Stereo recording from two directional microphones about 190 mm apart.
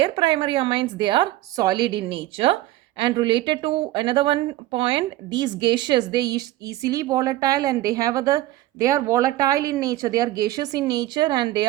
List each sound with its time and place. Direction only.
0.0 s speech: 25° right (ahead or behind)